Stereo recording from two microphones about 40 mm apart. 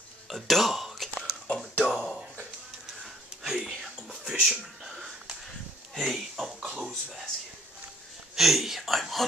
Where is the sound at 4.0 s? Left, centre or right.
Right.